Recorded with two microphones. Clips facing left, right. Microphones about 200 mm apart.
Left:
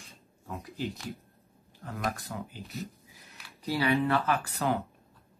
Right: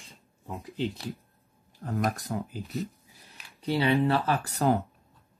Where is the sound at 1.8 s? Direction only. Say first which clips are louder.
Right 5 dB; 35° right (ahead or behind).